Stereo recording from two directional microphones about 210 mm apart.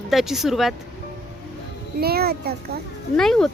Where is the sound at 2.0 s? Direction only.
50° right (ahead or behind).